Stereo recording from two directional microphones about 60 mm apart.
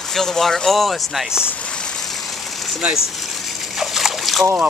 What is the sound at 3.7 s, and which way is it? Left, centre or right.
Splash, centre.